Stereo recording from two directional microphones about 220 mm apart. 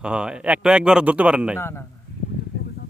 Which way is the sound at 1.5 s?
10° left (ahead or behind).